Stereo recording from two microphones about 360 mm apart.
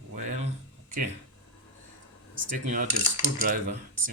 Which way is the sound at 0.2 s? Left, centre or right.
Right.